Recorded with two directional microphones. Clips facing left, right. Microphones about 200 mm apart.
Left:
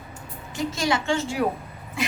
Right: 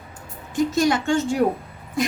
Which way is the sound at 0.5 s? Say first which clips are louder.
Right 6 dB; 50° right (ahead or behind).